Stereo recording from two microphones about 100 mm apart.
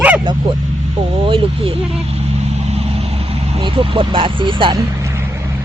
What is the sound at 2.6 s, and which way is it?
Vehicle, 85° right.